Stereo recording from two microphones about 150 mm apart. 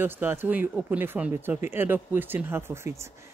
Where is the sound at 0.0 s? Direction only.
15° right (ahead or behind).